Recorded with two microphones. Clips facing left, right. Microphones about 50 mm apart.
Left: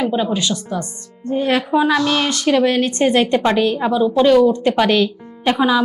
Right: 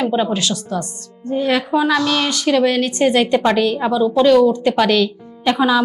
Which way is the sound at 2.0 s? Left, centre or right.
Centre.